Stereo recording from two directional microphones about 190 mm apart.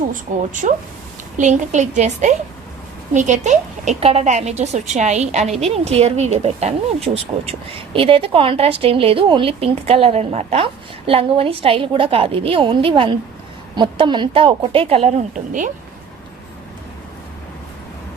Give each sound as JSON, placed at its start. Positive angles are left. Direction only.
{"t": 0.3, "sound": "a woman's voice", "side_deg": -45}